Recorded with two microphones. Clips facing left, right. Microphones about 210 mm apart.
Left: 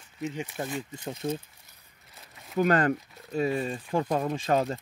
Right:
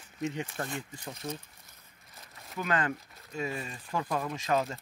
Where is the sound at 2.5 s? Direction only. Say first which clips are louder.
Left 8 dB; 40° left (ahead or behind).